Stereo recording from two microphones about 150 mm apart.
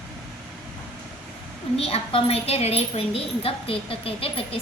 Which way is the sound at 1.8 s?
40° left (ahead or behind).